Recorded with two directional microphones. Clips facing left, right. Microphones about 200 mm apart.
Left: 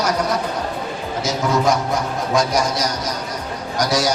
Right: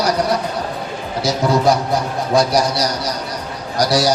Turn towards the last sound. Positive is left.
turn(degrees=-35)  # may be behind; listen again after turning